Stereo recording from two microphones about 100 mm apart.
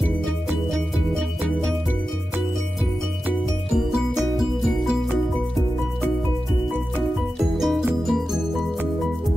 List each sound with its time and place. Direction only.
3.7 s music: centre (ahead or behind)
7.3 s music: centre (ahead or behind)